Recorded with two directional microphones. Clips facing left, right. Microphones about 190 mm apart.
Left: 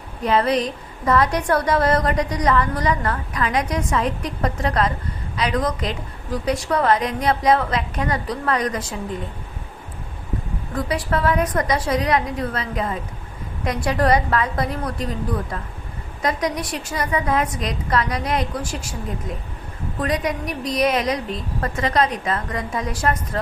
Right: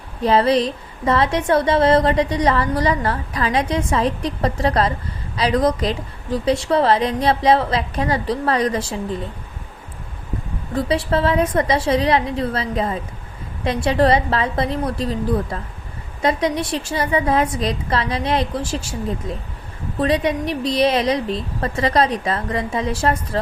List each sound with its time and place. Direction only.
0.2 s a woman's voice: 30° right (ahead or behind)
10.8 s a woman's voice: 30° right (ahead or behind)
16.2 s a woman's voice: 25° right (ahead or behind)
20.0 s a woman's voice: 30° right (ahead or behind)